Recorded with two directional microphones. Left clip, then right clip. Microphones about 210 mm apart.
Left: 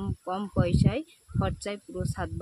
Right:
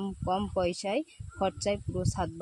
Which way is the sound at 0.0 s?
Centre (ahead or behind).